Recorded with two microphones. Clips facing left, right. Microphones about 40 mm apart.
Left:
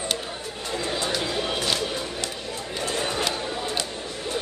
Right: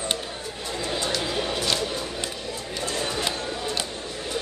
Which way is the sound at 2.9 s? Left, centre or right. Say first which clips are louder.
Left 1 dB; left.